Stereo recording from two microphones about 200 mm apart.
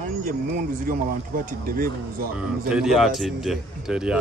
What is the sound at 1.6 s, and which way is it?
Speech, 45° right (ahead or behind).